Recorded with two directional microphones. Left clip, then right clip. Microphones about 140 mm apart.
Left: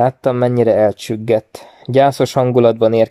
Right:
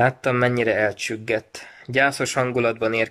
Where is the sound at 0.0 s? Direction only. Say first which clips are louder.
Left 5 dB; 30° left (ahead or behind).